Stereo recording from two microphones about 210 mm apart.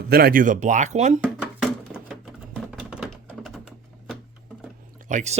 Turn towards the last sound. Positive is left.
turn(degrees=-35)  # may be behind; listen again after turning